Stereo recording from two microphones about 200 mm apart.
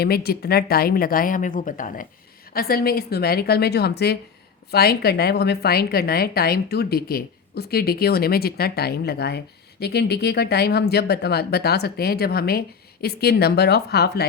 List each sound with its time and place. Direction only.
0.0 s a woman's voice: 50° left (ahead or behind)